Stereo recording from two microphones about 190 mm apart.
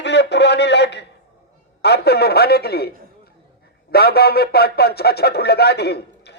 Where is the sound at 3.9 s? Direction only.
55° left (ahead or behind).